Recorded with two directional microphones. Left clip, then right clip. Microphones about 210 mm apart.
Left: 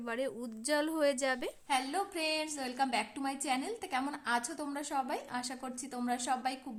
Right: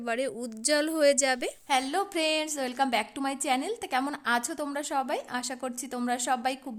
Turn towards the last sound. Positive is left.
turn(degrees=-40)  # may be behind; listen again after turning